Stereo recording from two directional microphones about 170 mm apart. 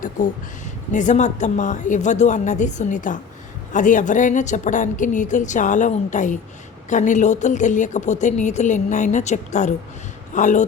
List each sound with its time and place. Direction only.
0.9 s a woman's voice: 45° left (ahead or behind)